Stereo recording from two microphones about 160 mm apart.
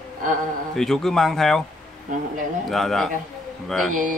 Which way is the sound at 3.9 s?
55° right (ahead or behind).